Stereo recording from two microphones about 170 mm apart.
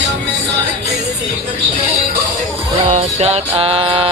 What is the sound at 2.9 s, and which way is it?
Music, 40° right (ahead or behind).